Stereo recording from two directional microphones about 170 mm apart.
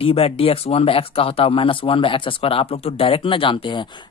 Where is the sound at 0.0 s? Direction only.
35° left (ahead or behind).